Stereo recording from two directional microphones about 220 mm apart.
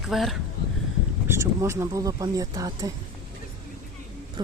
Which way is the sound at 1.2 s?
15° right (ahead or behind).